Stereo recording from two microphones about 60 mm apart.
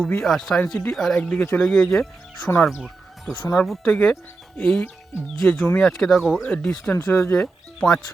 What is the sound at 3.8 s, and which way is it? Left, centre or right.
Speech, centre.